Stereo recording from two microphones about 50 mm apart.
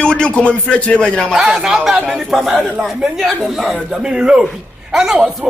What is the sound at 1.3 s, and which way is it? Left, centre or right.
Speech, centre.